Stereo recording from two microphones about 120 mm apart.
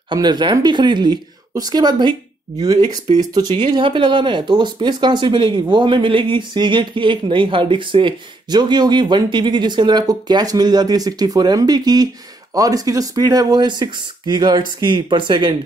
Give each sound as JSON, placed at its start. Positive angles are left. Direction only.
{"t": 0.1, "sound": "speech", "side_deg": -35}